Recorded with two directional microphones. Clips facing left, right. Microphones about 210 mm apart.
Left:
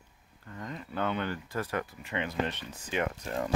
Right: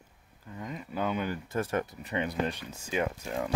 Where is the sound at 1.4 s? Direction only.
25° right (ahead or behind).